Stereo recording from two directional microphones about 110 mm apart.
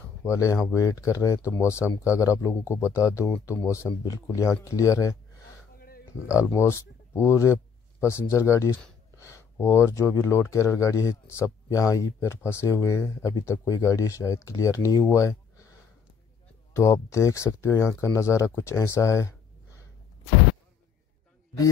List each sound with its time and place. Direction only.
0.0 s speech: 25° left (ahead or behind)
6.4 s speech: 25° left (ahead or behind)
16.7 s speech: 30° left (ahead or behind)